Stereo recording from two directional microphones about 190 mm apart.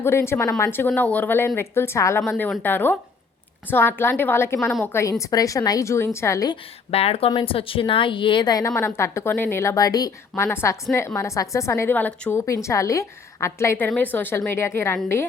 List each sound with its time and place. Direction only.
0.0 s a woman's voice: 15° left (ahead or behind)
4.6 s a woman's voice: centre (ahead or behind)
4.9 s a woman's voice: 15° left (ahead or behind)
6.9 s a woman's voice: 30° left (ahead or behind); by 14.9 s 15° left (ahead or behind)